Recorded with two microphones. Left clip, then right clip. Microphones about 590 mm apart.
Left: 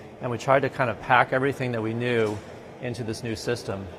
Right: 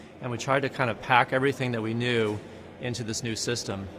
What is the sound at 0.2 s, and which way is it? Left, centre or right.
A man's voice, left.